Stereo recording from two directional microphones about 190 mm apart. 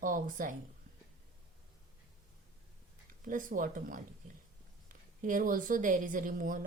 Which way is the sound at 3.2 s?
45° right (ahead or behind).